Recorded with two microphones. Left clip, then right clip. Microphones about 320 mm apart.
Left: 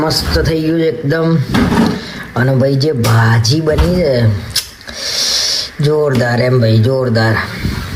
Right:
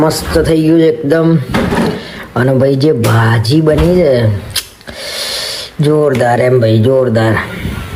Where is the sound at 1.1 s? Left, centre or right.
Right.